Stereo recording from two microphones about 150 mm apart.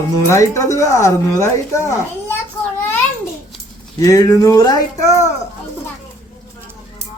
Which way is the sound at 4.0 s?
20° left (ahead or behind).